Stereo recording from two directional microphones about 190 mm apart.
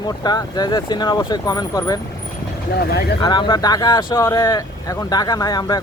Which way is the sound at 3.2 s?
25° left (ahead or behind).